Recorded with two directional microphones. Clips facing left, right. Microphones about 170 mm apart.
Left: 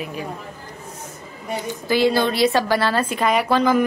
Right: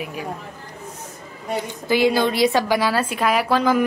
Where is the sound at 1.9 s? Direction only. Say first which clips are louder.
Even; 15° right (ahead or behind).